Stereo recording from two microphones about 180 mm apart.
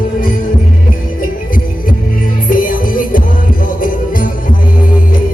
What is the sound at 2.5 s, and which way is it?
Music, 50° left (ahead or behind).